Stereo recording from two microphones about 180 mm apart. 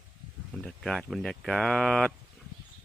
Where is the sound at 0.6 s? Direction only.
5° left (ahead or behind).